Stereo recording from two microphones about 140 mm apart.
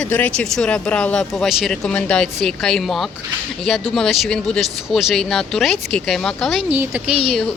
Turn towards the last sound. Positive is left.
turn(degrees=-10)  # may be behind; listen again after turning